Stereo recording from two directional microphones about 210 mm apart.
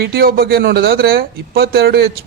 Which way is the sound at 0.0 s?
45° right (ahead or behind).